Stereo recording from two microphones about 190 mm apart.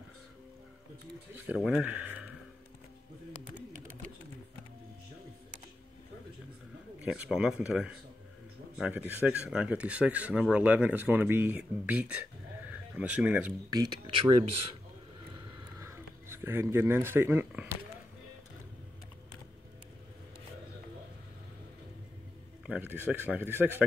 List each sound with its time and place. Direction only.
1.3 s speech: 10° right (ahead or behind)
7.0 s a man's voice: 5° right (ahead or behind)
13.7 s speech: 20° right (ahead or behind)
15.8 s a sound: 15° right (ahead or behind)
22.7 s speech: 10° right (ahead or behind)